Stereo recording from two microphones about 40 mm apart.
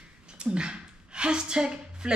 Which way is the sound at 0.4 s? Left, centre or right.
Right.